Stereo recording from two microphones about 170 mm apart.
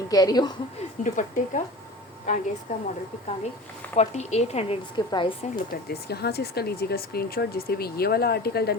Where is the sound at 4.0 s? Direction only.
40° left (ahead or behind).